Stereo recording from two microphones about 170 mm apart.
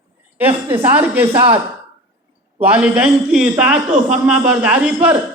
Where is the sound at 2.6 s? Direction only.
10° right (ahead or behind).